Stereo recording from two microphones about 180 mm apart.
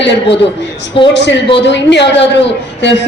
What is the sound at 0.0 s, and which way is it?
Speech, 75° left (ahead or behind).